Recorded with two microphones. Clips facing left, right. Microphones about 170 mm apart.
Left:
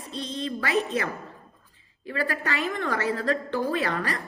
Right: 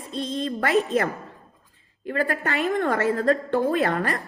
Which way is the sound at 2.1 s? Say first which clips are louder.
Right 4 dB; 50° right (ahead or behind).